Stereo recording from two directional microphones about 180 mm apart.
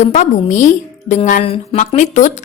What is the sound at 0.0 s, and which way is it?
A woman's voice, 45° left (ahead or behind).